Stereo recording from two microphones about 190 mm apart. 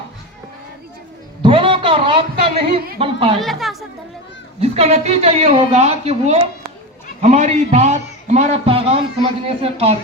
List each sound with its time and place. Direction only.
1.4 s a sound: 25° right (ahead or behind)
3.0 s speech: 25° right (ahead or behind)
3.3 s speech: centre (ahead or behind)
4.6 s a woman's voice: 35° right (ahead or behind)